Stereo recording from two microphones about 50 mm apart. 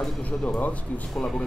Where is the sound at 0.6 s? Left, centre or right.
Left.